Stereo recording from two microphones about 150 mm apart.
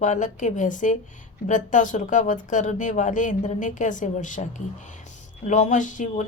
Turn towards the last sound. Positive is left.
turn(degrees=55)  # may be behind; listen again after turning